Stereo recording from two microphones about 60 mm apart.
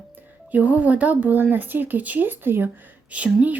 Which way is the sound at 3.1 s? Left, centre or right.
Right.